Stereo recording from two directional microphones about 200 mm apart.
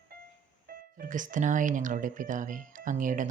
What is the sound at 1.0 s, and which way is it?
Speech, 40° right (ahead or behind).